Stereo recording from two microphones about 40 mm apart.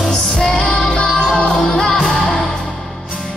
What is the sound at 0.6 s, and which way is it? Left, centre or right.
Music, left.